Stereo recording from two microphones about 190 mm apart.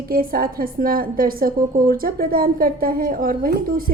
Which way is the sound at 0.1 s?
50° right (ahead or behind).